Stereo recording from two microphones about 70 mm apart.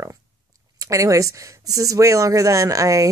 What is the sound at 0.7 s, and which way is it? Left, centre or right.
Speech, right.